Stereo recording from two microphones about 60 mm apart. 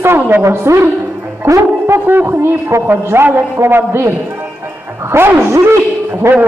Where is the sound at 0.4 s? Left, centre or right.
Right.